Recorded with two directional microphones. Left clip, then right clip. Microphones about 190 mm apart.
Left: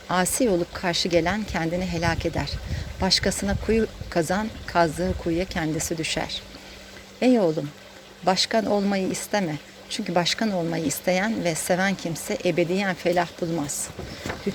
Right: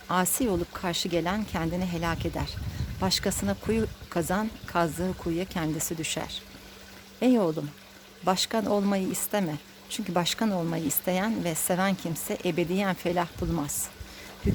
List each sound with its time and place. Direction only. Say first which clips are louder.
0.1 s speech: left 5 dB; 15° right (ahead or behind)